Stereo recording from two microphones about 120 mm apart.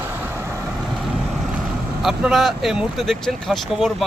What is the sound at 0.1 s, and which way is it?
Vehicle, 20° right (ahead or behind).